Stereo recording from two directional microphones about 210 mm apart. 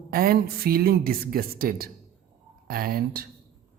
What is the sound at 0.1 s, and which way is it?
A man's voice, 45° right (ahead or behind).